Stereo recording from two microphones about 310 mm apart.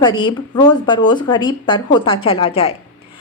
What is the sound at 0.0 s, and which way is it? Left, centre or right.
A woman's voice, centre.